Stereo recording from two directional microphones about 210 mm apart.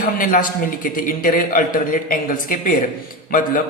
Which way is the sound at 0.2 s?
40° left (ahead or behind).